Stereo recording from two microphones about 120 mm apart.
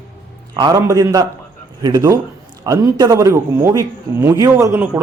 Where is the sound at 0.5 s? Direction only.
35° right (ahead or behind).